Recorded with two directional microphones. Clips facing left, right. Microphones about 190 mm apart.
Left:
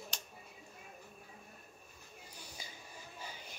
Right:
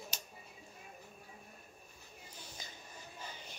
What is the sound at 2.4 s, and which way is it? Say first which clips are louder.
Music: even; 10° left (ahead or behind).